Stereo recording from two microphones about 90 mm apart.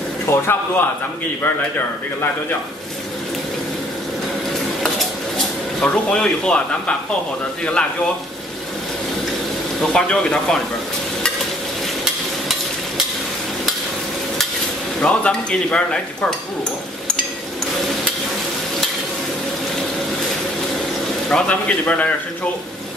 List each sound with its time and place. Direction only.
0.3 s speech: 25° left (ahead or behind)
5.8 s dishes: 10° left (ahead or behind)
9.8 s dishes: 10° left (ahead or behind)
12.0 s a sound: 5° right (ahead or behind)
15.0 s dishes: 15° left (ahead or behind)
21.3 s dishes: 10° left (ahead or behind)